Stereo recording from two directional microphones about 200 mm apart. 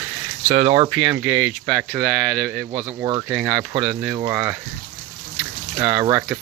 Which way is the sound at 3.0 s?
20° right (ahead or behind).